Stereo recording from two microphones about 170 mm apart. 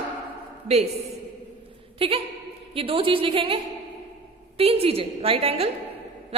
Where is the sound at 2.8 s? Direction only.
30° right (ahead or behind).